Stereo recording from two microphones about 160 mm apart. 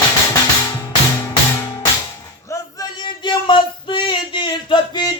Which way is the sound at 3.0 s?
30° left (ahead or behind).